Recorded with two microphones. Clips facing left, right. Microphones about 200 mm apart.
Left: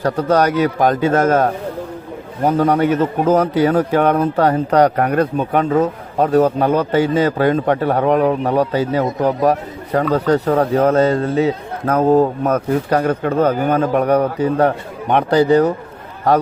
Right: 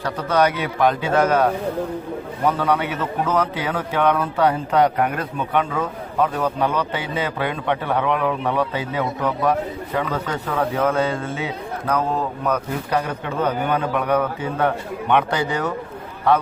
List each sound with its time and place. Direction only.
0.0 s a man's voice: 40° left (ahead or behind)